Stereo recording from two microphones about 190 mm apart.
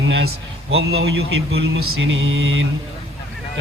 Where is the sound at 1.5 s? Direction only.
90° right.